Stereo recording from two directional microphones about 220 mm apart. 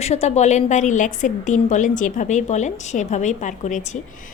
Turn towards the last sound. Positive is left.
turn(degrees=35)  # may be behind; listen again after turning